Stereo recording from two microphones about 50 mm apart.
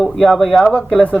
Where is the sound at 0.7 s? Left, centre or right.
Left.